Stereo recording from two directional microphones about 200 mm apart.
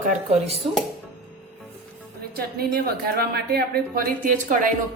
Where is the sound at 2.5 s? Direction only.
50° right (ahead or behind).